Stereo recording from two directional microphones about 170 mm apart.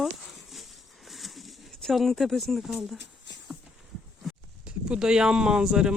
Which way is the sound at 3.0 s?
90° left.